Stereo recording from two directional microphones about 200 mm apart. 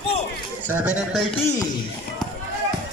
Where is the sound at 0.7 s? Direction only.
5° right (ahead or behind).